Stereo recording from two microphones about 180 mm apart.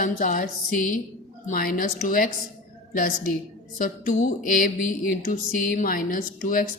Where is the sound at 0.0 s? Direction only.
45° left (ahead or behind).